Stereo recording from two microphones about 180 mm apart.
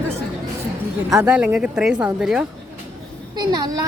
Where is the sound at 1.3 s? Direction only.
5° right (ahead or behind).